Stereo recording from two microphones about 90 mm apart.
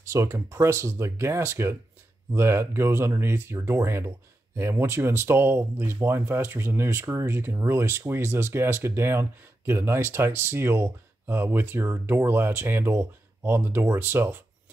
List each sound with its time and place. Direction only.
0.1 s speech: 35° right (ahead or behind)